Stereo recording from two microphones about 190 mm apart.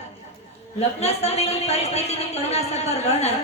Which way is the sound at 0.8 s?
35° left (ahead or behind).